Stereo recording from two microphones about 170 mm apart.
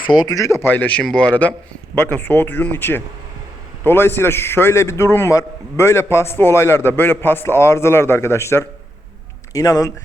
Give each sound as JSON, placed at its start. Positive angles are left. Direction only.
{"t": 0.1, "sound": "a man's voice", "side_deg": 25}